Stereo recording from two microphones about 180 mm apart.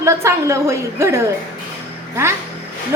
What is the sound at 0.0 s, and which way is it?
A woman's voice, 15° right (ahead or behind).